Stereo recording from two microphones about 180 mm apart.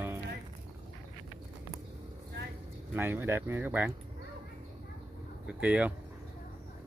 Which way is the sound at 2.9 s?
10° right (ahead or behind).